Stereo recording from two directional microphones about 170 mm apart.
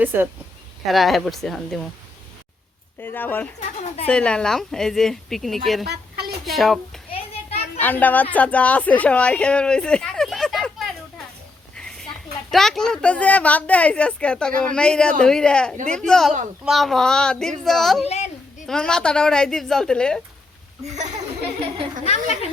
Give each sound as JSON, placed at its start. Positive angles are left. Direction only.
{"t": 0.0, "sound": "speech", "side_deg": -10}
{"t": 0.9, "sound": "a woman's voice", "side_deg": 0}
{"t": 3.0, "sound": "a woman's voice", "side_deg": 10}
{"t": 5.9, "sound": "a sound", "side_deg": -70}
{"t": 6.4, "sound": "a woman's voice", "side_deg": 0}
{"t": 11.8, "sound": "a sound", "side_deg": 5}
{"t": 12.5, "sound": "a woman's voice", "side_deg": 0}
{"t": 18.0, "sound": "a woman's voice", "side_deg": 40}
{"t": 18.6, "sound": "a woman's voice", "side_deg": 5}